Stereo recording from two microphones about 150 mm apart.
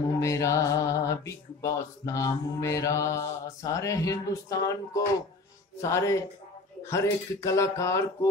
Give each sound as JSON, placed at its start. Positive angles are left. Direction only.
{"t": 0.2, "sound": "speech", "side_deg": 20}